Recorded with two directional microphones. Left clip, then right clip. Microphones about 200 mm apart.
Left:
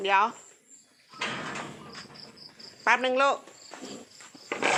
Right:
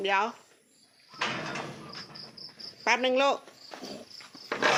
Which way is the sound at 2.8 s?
25° right (ahead or behind).